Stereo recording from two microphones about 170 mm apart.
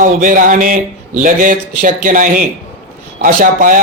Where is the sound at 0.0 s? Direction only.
50° right (ahead or behind).